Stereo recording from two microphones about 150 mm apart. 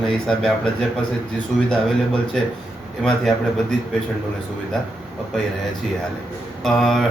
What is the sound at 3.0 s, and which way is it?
Speech, 5° left (ahead or behind).